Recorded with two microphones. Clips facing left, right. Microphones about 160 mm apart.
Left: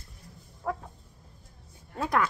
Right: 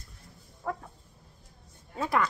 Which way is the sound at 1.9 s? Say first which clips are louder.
Left 1 dB; centre (ahead or behind).